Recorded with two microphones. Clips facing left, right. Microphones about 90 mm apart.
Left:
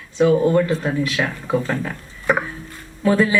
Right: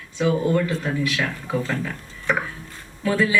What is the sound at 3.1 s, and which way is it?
Speech, 35° left (ahead or behind).